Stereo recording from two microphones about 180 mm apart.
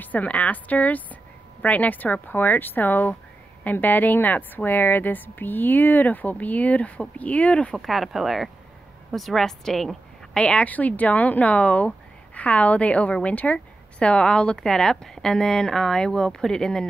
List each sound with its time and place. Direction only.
0.0 s a woman's voice: 10° left (ahead or behind)